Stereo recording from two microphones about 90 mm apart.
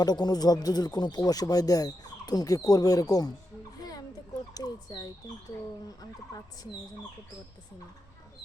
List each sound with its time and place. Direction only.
0.0 s speech: 50° left (ahead or behind)
3.8 s a sound: 45° left (ahead or behind)
4.5 s speech: 45° left (ahead or behind)